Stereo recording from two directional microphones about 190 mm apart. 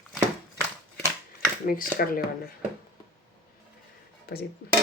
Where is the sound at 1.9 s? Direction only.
50° left (ahead or behind).